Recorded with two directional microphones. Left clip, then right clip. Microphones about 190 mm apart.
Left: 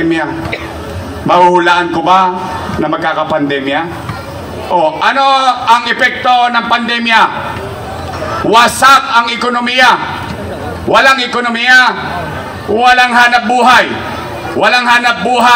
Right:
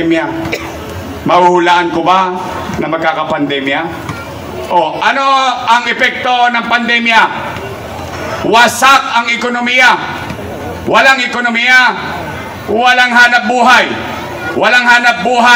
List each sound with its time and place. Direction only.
1.2 s a man's voice: 30° left (ahead or behind)
8.5 s a man's voice: 30° left (ahead or behind)
10.9 s a man's voice: 30° left (ahead or behind)